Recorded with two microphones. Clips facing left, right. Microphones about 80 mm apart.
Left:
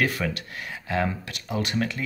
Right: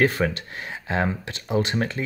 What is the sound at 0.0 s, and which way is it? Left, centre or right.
Speech, right.